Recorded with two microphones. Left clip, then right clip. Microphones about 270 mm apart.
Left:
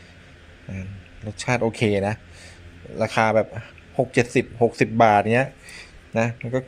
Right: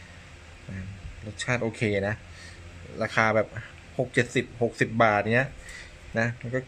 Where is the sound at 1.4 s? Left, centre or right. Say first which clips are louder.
Left 6 dB; centre.